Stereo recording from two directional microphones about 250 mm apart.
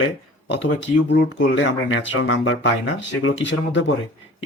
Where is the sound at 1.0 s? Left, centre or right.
Left.